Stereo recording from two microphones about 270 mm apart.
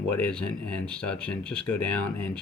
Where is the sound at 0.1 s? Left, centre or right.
Centre.